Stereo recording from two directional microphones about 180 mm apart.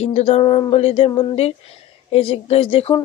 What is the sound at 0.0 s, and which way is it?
Speech, 35° left (ahead or behind).